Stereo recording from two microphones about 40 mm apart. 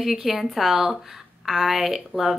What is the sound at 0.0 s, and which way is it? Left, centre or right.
A woman's voice, centre.